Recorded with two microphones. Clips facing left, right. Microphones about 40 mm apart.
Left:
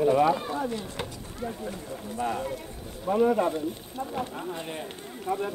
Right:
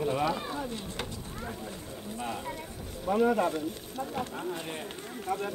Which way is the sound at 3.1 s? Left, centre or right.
Centre.